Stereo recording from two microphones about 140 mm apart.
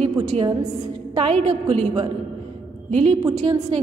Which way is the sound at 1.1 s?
50° right (ahead or behind).